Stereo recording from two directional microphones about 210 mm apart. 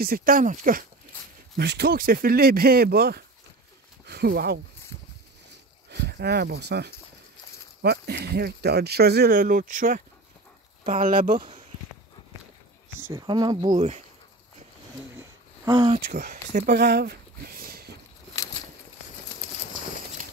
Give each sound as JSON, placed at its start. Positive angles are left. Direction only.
{"t": 0.0, "sound": "speech", "side_deg": -45}
{"t": 1.6, "sound": "speech", "side_deg": -50}
{"t": 4.0, "sound": "a sound", "side_deg": -50}
{"t": 5.9, "sound": "speech", "side_deg": -50}
{"t": 11.3, "sound": "speech", "side_deg": -25}
{"t": 13.1, "sound": "speech", "side_deg": -20}
{"t": 15.1, "sound": "a sound", "side_deg": -15}
{"t": 16.1, "sound": "speech", "side_deg": -45}